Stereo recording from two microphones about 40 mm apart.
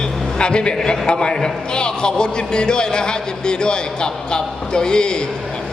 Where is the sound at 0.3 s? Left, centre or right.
Left.